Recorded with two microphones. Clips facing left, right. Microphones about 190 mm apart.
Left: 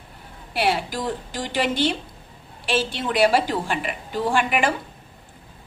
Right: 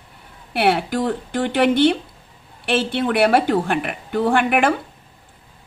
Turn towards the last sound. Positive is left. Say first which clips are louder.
# right 4 dB
turn(degrees=-60)  # may be behind; listen again after turning